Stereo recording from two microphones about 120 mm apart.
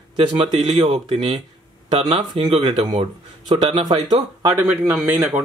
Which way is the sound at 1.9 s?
50° right (ahead or behind).